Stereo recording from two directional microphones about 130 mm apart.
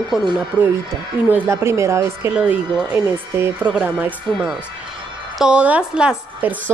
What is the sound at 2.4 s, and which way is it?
A woman's voice, 10° right (ahead or behind).